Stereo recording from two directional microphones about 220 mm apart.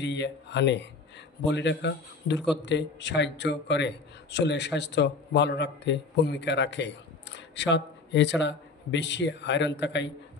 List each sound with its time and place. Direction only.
0.0 s a man's voice: 50° left (ahead or behind)